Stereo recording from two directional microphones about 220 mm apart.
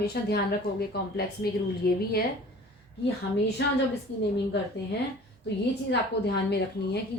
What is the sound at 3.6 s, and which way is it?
Speech, 50° left (ahead or behind).